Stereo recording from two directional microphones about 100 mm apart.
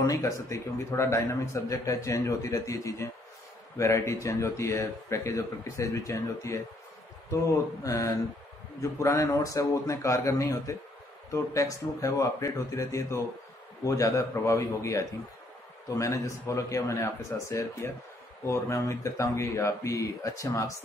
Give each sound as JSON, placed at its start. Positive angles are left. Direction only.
{"t": 0.0, "sound": "speech", "side_deg": 35}
{"t": 7.8, "sound": "speech", "side_deg": 35}